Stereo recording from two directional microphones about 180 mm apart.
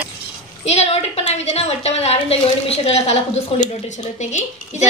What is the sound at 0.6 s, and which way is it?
A woman's voice, 35° left (ahead or behind).